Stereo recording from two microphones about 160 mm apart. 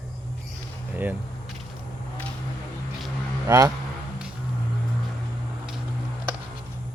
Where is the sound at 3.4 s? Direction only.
20° right (ahead or behind).